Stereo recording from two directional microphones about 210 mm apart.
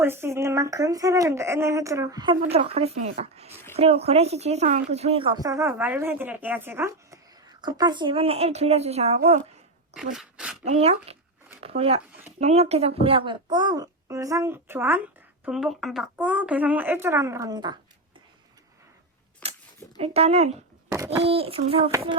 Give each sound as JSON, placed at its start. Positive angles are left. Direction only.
{"t": 0.0, "sound": "a child's voice", "side_deg": -10}
{"t": 10.2, "sound": "speech", "side_deg": -5}
{"t": 10.6, "sound": "a child's voice", "side_deg": -30}
{"t": 19.4, "sound": "cap gun", "side_deg": 5}
{"t": 20.0, "sound": "a child's voice", "side_deg": -30}
{"t": 20.9, "sound": "speech", "side_deg": -15}
{"t": 21.2, "sound": "a child's voice", "side_deg": -30}